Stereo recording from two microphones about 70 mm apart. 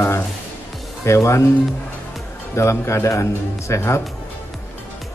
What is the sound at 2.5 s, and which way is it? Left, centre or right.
A man's voice, left.